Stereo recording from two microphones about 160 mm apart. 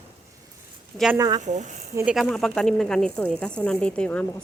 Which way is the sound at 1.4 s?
45° right (ahead or behind).